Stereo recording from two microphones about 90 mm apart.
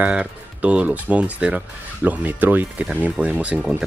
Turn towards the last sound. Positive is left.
turn(degrees=-15)  # may be behind; listen again after turning